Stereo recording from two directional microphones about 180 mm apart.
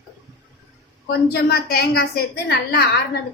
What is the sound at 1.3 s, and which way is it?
A woman's voice, 60° left (ahead or behind).